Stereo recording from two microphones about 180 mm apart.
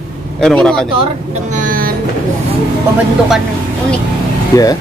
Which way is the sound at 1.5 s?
50° right (ahead or behind).